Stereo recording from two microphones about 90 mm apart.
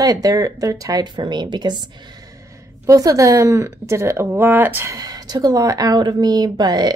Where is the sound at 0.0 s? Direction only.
45° right (ahead or behind).